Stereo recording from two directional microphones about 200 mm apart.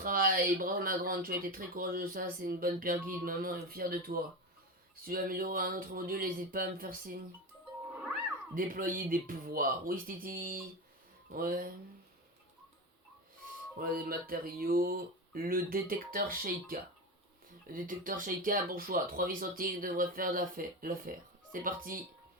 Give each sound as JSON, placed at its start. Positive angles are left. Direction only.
{"t": 0.0, "sound": "speech", "side_deg": -45}
{"t": 8.5, "sound": "speech", "side_deg": -45}
{"t": 13.7, "sound": "speech", "side_deg": -45}